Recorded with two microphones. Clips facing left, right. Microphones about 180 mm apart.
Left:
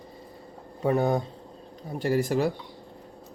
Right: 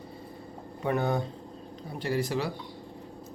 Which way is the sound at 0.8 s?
35° left (ahead or behind).